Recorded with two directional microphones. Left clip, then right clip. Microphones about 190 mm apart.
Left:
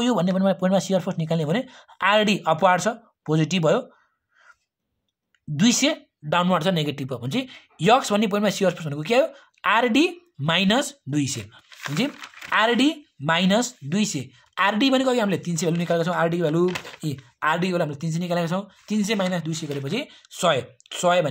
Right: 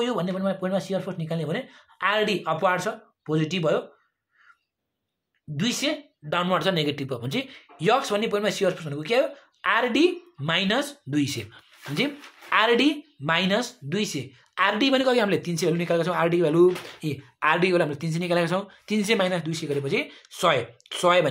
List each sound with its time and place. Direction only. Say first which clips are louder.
0.0 s speech: left 4 dB; 45° left (ahead or behind)
5.6 s speech: left 5 dB; 50° left (ahead or behind); by 21.3 s 30° left (ahead or behind)